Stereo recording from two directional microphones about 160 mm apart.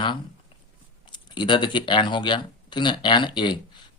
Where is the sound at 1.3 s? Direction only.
30° left (ahead or behind).